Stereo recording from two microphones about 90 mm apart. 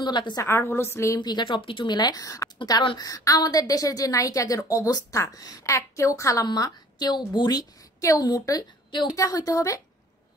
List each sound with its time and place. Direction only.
0.0 s speech: 55° left (ahead or behind)
0.4 s a woman's voice: 30° left (ahead or behind)
1.2 s speech: 55° left (ahead or behind); by 1.9 s 75° left (ahead or behind)
1.9 s a woman's voice: 50° left (ahead or behind); by 6.4 s 35° left (ahead or behind)
6.4 s a woman's voice: 50° left (ahead or behind)